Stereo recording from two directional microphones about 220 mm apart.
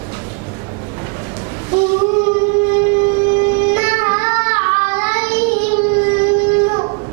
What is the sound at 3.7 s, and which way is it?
Music, 10° right (ahead or behind).